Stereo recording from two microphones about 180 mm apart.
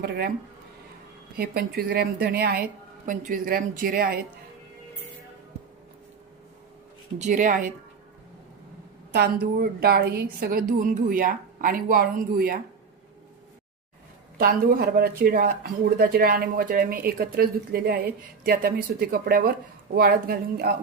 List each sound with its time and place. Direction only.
1.4 s a woman's voice: 60° right (ahead or behind)
7.2 s a woman's voice: 45° right (ahead or behind)
9.1 s a woman's voice: 60° right (ahead or behind)
14.3 s speech: 55° right (ahead or behind)